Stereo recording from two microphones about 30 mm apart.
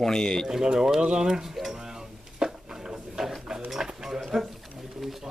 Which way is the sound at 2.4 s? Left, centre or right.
Centre.